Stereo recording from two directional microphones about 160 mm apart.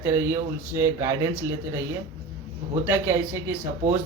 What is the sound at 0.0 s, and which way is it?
Speech, 15° right (ahead or behind).